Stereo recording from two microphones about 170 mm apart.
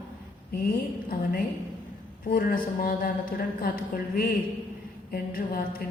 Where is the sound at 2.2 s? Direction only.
55° left (ahead or behind).